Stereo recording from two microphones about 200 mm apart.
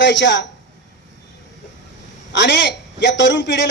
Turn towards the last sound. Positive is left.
turn(degrees=60)  # may be behind; listen again after turning